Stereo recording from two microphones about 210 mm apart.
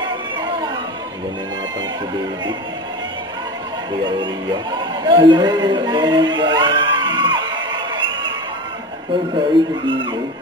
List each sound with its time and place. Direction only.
4.0 s a man's voice: 20° right (ahead or behind)
9.5 s speech: 20° right (ahead or behind)